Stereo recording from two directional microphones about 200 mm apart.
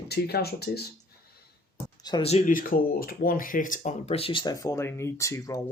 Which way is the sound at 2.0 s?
20° left (ahead or behind).